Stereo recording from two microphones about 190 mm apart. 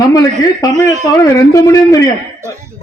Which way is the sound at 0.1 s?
20° left (ahead or behind).